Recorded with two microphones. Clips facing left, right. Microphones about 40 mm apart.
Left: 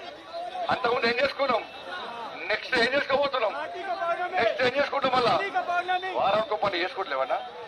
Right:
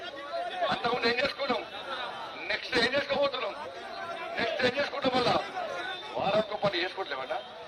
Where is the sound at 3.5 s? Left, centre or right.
Left.